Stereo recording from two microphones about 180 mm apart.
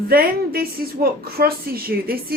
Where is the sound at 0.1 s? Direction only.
55° right (ahead or behind).